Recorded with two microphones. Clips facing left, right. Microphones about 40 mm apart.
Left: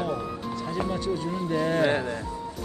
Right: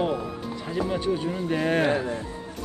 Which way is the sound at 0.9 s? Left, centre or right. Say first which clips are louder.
Right 2 dB; right.